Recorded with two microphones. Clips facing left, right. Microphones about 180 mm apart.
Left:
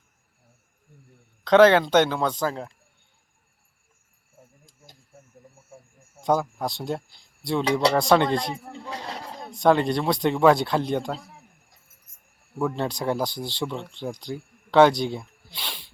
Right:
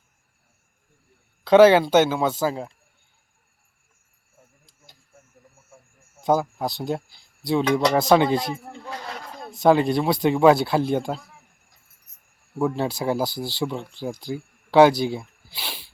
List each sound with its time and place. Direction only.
1.5 s speech: 10° right (ahead or behind)
6.1 s speech: 5° right (ahead or behind)
7.6 s speech: 30° left (ahead or behind)
7.9 s speech: 5° right (ahead or behind)
8.5 s a sound: 30° left (ahead or behind)
9.4 s speech: 5° right (ahead or behind)
12.5 s speech: 5° right (ahead or behind)